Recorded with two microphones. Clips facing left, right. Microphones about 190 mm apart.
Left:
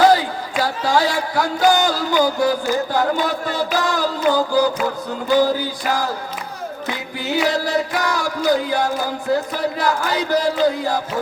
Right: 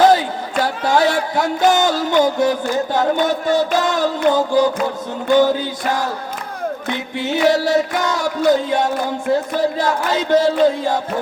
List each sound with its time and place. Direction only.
0.0 s crowd: 20° right (ahead or behind)
0.9 s music: 20° right (ahead or behind)